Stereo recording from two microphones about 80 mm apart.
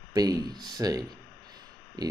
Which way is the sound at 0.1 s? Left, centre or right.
Right.